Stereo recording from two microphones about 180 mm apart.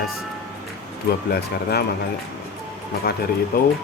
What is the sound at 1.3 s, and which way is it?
Speech, 60° left (ahead or behind).